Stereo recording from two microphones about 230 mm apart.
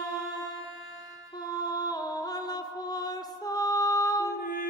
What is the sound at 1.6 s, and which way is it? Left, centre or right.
Music, centre.